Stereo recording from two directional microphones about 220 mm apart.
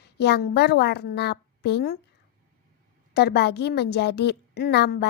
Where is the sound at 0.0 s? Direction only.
50° left (ahead or behind).